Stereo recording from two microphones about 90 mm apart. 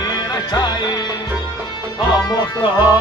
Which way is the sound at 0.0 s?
45° left (ahead or behind).